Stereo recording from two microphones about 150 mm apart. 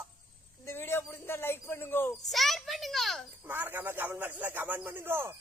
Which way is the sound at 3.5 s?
15° right (ahead or behind).